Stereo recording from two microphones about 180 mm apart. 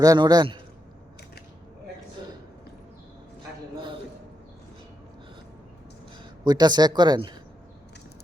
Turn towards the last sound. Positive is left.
turn(degrees=-25)  # may be behind; listen again after turning